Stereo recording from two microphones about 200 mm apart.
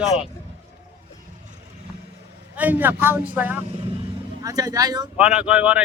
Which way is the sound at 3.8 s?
20° right (ahead or behind).